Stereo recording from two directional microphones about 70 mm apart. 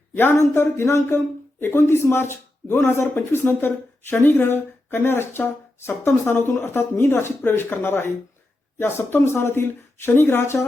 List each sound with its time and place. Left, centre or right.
0.1 s speech: left